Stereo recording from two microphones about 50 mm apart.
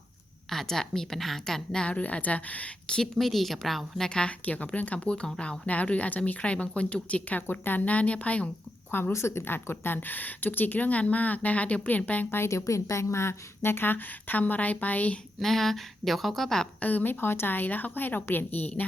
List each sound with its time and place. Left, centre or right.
0.5 s a woman's voice: centre
1.9 s speech: left
2.8 s a woman's voice: centre
3.2 s speech: centre
4.4 s speech: left
7.5 s a woman's voice: left
7.9 s speech: left
8.9 s a woman's voice: left
9.1 s a woman's voice: left
12.5 s a woman's voice: left
15.4 s speech: centre
16.8 s a woman's voice: left